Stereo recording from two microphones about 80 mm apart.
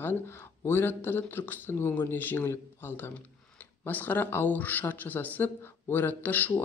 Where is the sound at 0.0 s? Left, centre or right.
Left.